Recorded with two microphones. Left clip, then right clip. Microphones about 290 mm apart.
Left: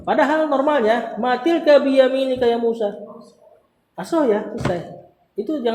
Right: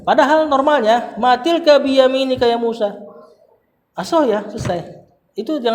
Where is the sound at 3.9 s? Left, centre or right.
Right.